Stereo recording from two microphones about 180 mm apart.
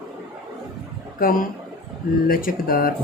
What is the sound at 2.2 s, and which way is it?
Speech, 55° left (ahead or behind).